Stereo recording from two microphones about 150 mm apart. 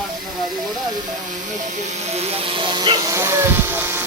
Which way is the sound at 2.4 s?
35° right (ahead or behind).